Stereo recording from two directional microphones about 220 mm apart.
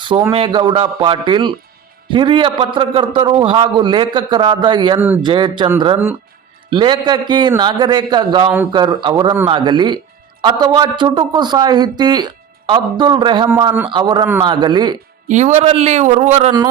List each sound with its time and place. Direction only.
0.0 s a man's voice: 20° right (ahead or behind)
4.9 s speech: 10° right (ahead or behind)
5.2 s a man's voice: 20° right (ahead or behind)
15.3 s a man's voice: 30° right (ahead or behind)